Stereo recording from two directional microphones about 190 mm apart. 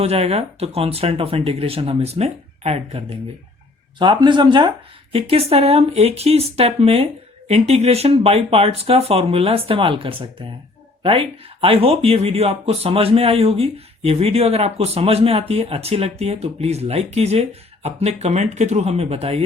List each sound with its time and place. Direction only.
0.0 s speech: 35° right (ahead or behind)